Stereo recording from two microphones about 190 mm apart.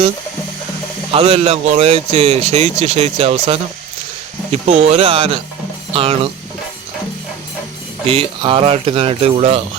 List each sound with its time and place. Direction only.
1.1 s speech: 30° right (ahead or behind)
8.0 s speech: 30° right (ahead or behind)